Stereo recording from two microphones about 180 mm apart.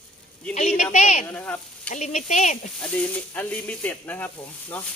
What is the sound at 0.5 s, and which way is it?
Speech, 40° left (ahead or behind).